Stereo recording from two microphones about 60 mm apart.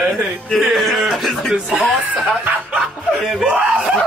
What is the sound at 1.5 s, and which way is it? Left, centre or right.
Speech, centre.